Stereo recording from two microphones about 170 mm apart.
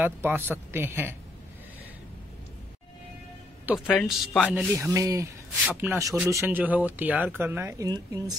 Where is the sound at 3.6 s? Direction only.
5° right (ahead or behind).